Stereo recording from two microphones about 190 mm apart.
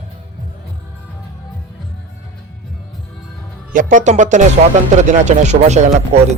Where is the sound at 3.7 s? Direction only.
40° right (ahead or behind).